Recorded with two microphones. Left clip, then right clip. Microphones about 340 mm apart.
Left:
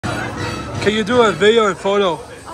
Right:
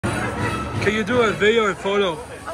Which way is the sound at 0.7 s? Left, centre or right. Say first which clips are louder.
Left 6 dB; centre.